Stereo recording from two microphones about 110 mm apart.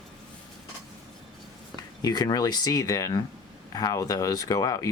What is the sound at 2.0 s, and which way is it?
Speech, 40° left (ahead or behind).